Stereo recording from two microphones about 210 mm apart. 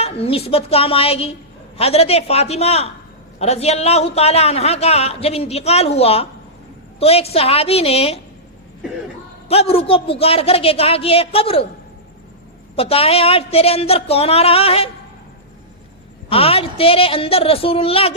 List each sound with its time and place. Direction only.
0.0 s a man's voice: 30° left (ahead or behind)
9.5 s a man's voice: 30° left (ahead or behind)
12.7 s a man's voice: 25° left (ahead or behind)
16.3 s a man's voice: 25° left (ahead or behind)